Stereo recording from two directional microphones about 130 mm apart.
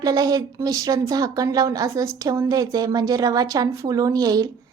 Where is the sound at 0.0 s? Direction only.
30° right (ahead or behind).